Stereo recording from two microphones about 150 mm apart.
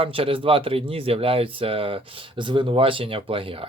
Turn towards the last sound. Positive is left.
turn(degrees=-35)  # may be behind; listen again after turning